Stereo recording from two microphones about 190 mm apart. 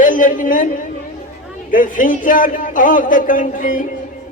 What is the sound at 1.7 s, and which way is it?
A woman's voice, 45° left (ahead or behind).